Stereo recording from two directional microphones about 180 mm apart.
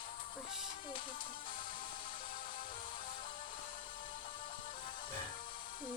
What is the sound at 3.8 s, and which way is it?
Music, 30° left (ahead or behind).